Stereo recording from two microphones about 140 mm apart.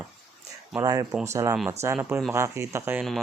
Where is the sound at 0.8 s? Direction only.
25° right (ahead or behind).